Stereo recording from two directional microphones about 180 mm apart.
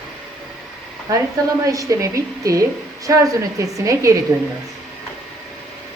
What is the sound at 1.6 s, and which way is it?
A woman's voice, 20° right (ahead or behind).